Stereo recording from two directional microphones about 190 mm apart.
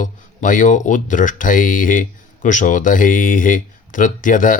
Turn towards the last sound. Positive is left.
turn(degrees=45)  # may be behind; listen again after turning